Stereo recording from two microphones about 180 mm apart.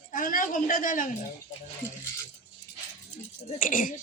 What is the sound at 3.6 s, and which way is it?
Speech, 50° left (ahead or behind).